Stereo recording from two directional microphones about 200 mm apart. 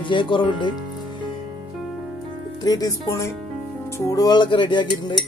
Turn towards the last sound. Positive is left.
turn(degrees=25)  # may be behind; listen again after turning